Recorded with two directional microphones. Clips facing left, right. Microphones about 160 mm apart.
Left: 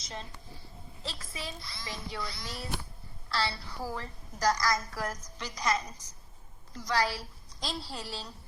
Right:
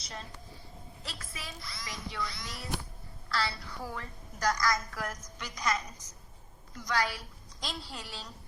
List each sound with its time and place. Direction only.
1.0 s a woman's voice: 25° left (ahead or behind)